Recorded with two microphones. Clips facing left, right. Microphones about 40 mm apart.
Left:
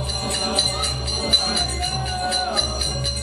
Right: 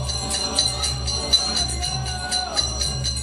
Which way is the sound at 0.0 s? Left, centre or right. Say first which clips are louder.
Left 2 dB; centre.